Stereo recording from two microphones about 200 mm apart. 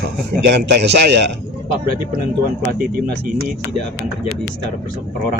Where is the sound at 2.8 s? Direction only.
50° right (ahead or behind).